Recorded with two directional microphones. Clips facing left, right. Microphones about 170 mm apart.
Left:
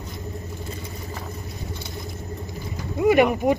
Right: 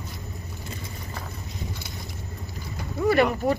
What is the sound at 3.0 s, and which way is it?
Speech, 15° left (ahead or behind).